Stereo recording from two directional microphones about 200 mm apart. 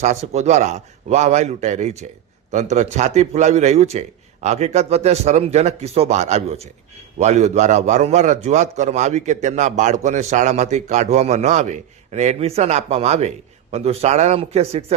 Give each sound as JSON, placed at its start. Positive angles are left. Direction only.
{"t": 0.0, "sound": "a man's voice", "side_deg": -35}